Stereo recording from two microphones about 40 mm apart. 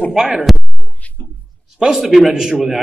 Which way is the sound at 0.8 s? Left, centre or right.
Left.